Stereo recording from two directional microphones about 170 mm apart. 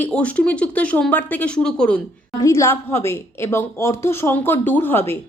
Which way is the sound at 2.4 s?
15° left (ahead or behind).